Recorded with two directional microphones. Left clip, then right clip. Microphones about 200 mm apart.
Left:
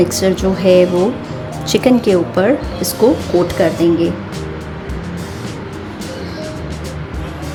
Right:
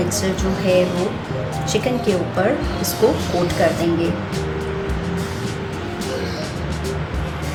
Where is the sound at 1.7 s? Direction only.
55° left (ahead or behind).